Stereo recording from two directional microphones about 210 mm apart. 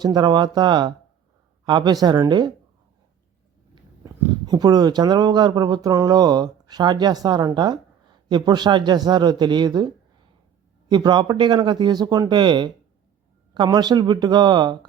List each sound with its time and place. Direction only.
0.0 s speech: 20° right (ahead or behind)
4.4 s speech: 20° right (ahead or behind)